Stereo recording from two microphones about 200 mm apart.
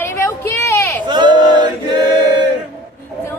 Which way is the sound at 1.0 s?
20° right (ahead or behind).